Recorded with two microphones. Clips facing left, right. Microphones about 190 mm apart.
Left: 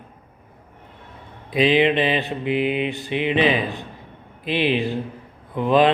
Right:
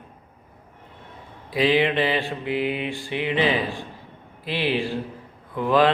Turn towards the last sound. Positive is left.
turn(degrees=20)  # may be behind; listen again after turning